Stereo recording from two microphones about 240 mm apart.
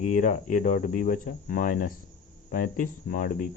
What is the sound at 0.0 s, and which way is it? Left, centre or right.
Speech, left.